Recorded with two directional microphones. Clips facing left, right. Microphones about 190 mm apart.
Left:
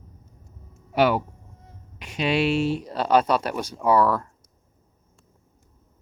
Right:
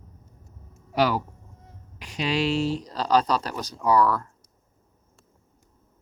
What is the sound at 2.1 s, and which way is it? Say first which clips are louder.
Speech: left 2 dB; 10° left (ahead or behind).